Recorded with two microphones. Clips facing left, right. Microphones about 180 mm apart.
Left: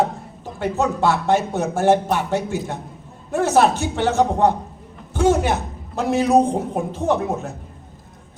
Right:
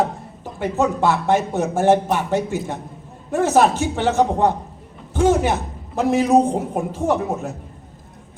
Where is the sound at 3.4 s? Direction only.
15° right (ahead or behind).